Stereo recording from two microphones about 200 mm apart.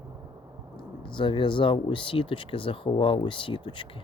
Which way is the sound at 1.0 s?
25° left (ahead or behind).